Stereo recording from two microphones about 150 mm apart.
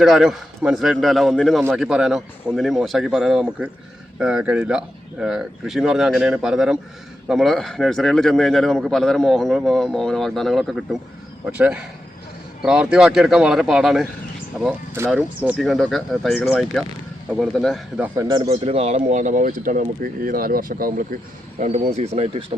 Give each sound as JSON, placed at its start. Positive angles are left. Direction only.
{"t": 0.0, "sound": "speech", "side_deg": -5}
{"t": 15.1, "sound": "speech", "side_deg": -10}
{"t": 18.1, "sound": "speech", "side_deg": -25}
{"t": 18.4, "sound": "speech", "side_deg": -40}
{"t": 21.6, "sound": "speech", "side_deg": -50}